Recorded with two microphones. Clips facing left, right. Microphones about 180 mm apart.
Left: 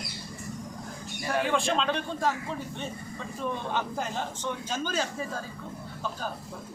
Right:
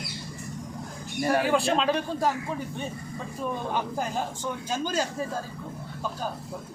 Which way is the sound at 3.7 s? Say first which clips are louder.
Right 2 dB; 10° right (ahead or behind).